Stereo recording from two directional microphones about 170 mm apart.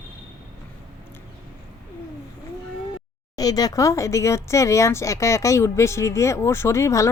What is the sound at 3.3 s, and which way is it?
Speech, 20° left (ahead or behind).